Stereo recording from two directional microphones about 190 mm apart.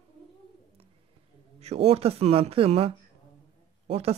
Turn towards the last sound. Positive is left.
turn(degrees=-30)  # may be behind; listen again after turning